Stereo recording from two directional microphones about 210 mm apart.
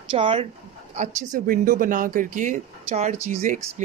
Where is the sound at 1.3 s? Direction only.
40° right (ahead or behind).